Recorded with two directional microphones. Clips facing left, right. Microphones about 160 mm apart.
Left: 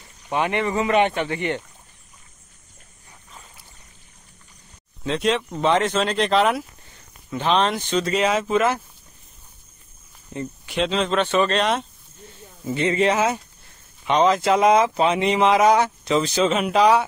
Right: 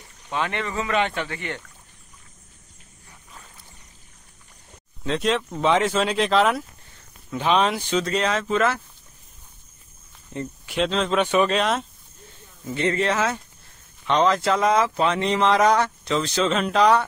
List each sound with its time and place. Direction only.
0.3 s speech: 15° left (ahead or behind)
5.0 s speech: centre (ahead or behind)
10.7 s speech: centre (ahead or behind)
11.1 s speech: 10° right (ahead or behind)
12.6 s speech: 15° left (ahead or behind)